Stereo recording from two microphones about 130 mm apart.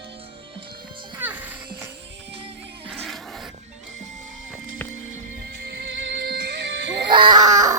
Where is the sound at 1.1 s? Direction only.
15° right (ahead or behind).